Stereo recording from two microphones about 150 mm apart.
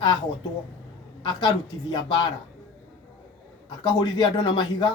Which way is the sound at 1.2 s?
30° left (ahead or behind).